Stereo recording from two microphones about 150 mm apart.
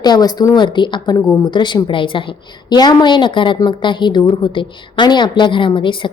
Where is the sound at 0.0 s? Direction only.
25° left (ahead or behind).